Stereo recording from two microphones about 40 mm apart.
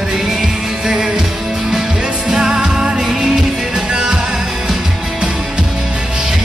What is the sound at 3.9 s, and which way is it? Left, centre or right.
Music, centre.